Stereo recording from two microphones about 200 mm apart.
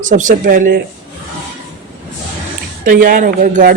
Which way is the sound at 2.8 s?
45° right (ahead or behind).